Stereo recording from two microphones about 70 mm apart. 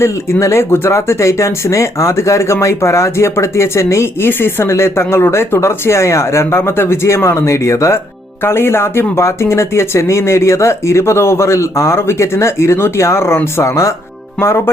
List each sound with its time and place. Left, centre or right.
0.0 s speech: left
14.3 s speech: left